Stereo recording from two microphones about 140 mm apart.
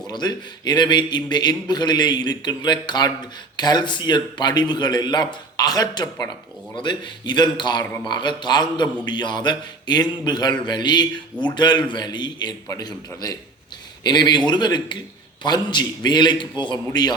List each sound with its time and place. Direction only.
0.1 s a man's voice: 30° left (ahead or behind)